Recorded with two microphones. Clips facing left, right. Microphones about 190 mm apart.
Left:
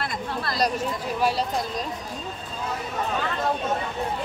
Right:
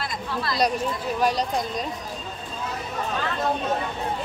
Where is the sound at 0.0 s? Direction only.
55° left (ahead or behind).